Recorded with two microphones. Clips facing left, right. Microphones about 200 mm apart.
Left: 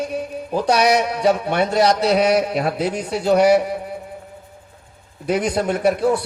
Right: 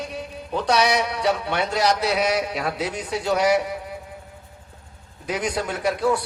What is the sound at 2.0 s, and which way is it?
Speech, 35° left (ahead or behind).